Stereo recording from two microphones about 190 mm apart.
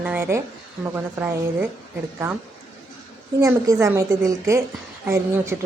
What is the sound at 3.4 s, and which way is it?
A woman's voice, 15° right (ahead or behind).